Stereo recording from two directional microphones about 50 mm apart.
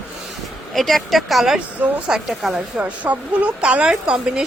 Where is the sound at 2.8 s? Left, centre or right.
Right.